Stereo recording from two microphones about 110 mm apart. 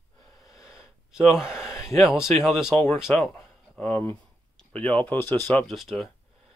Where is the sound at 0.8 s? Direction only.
5° right (ahead or behind).